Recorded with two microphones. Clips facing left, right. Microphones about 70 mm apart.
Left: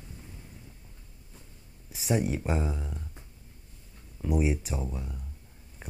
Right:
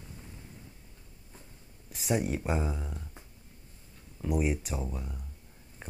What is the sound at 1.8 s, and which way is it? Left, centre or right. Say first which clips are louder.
Speech: left 2 dB; centre.